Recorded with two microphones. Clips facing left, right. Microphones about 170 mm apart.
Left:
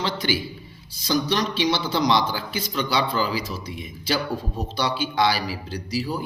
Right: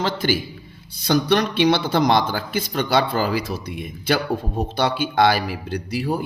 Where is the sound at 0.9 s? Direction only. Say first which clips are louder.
Right 5 dB; 60° right (ahead or behind).